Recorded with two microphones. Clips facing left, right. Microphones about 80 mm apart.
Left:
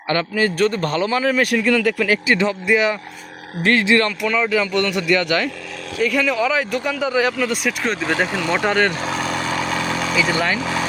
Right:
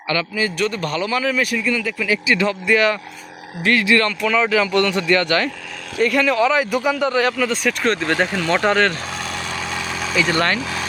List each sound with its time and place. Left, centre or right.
0.1 s speech: left
1.5 s speech: left
2.5 s speech: centre
3.6 s speech: left
4.3 s a man's voice: centre
7.1 s speech: centre
9.6 s vehicle: centre